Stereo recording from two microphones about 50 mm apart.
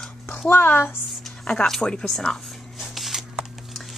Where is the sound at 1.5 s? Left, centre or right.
Centre.